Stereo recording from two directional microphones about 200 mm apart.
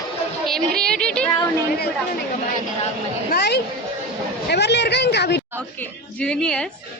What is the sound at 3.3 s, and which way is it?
Speech, 55° left (ahead or behind).